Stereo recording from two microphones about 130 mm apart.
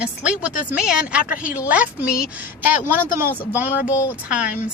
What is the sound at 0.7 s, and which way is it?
Speech, 5° right (ahead or behind).